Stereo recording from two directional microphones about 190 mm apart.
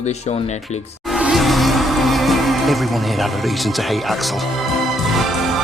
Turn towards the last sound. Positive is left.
turn(degrees=0)  # may be behind; listen again after turning